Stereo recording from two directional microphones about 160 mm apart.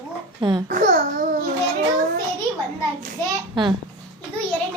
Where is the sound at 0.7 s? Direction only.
55° right (ahead or behind).